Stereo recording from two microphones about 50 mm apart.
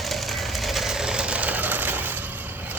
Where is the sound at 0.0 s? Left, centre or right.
Centre; by 2.2 s right.